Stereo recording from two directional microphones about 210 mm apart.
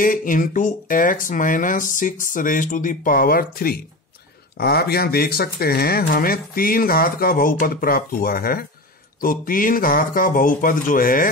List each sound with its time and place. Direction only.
0.0 s speech: 40° left (ahead or behind)